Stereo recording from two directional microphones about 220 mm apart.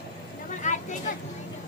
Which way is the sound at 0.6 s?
35° left (ahead or behind).